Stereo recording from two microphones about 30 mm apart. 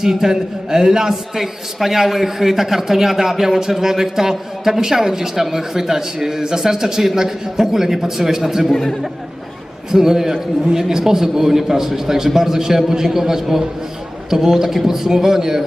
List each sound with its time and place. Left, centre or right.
0.0 s a man's voice: centre
9.9 s a man's voice: centre